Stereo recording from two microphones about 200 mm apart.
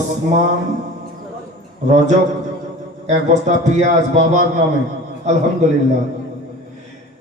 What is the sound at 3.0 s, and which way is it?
Music, 35° right (ahead or behind).